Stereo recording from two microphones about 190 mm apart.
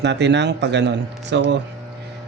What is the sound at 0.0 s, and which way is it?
Speech, 65° right (ahead or behind).